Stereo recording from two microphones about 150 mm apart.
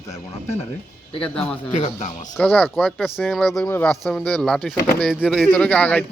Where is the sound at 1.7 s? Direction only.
50° left (ahead or behind).